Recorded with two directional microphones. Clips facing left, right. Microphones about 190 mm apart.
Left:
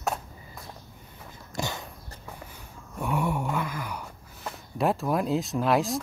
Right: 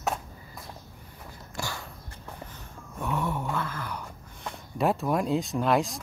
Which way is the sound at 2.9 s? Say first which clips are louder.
Left 2 dB; 10° left (ahead or behind).